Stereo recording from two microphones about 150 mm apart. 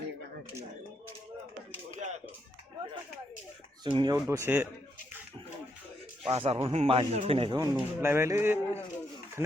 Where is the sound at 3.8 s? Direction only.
30° right (ahead or behind).